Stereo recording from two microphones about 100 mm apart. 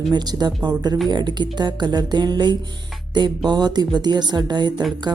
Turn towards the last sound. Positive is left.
turn(degrees=-45)  # may be behind; listen again after turning